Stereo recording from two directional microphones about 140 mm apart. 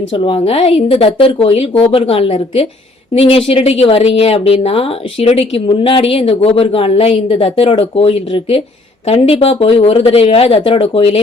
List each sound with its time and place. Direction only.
0.1 s speech: 40° left (ahead or behind)